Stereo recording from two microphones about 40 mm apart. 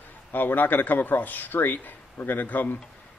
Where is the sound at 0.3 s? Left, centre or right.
Left.